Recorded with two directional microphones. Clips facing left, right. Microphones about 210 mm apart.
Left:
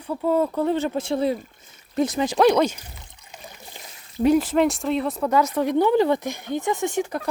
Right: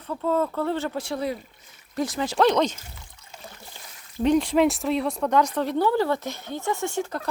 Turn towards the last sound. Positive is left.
turn(degrees=15)  # may be behind; listen again after turning